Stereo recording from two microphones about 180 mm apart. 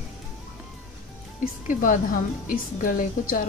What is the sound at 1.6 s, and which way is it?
A woman's voice, 45° left (ahead or behind).